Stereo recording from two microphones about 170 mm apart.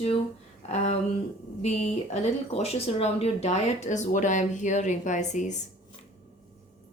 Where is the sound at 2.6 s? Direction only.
35° left (ahead or behind).